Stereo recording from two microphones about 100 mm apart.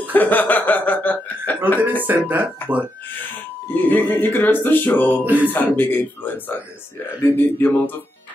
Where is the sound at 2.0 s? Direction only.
15° right (ahead or behind).